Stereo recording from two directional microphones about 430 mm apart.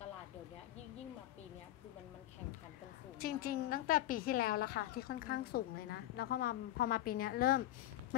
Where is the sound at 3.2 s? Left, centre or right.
Left.